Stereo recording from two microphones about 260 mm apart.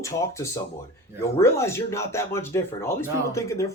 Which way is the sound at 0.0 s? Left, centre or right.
Centre.